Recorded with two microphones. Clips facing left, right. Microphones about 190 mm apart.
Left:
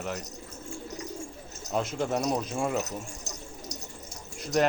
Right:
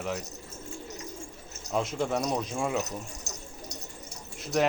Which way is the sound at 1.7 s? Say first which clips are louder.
Even; centre (ahead or behind).